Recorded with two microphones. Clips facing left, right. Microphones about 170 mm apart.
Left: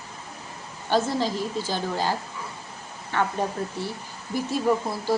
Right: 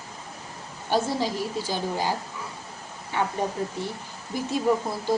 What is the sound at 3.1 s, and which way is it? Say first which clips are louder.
Speech: left 1 dB; 15° right (ahead or behind).